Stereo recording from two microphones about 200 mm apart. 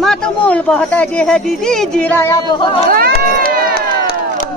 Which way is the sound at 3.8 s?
50° left (ahead or behind).